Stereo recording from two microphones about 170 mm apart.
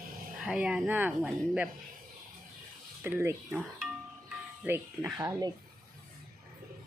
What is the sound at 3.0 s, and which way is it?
Speech, 15° right (ahead or behind).